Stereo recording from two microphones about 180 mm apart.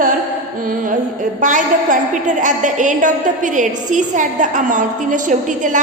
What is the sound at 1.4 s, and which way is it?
A woman's voice, 45° right (ahead or behind).